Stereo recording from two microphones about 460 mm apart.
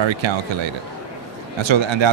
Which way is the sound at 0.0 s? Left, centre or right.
Right.